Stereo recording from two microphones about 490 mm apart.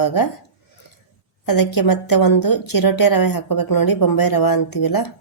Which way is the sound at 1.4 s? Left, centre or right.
Left.